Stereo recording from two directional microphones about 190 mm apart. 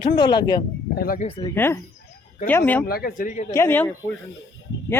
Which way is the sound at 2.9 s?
50° left (ahead or behind).